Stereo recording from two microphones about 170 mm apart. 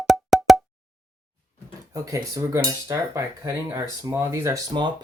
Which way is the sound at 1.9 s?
20° right (ahead or behind).